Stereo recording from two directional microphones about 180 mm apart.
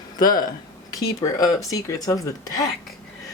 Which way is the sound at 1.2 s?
20° left (ahead or behind).